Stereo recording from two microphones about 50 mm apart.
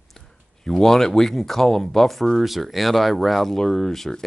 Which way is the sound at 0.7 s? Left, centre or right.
Centre.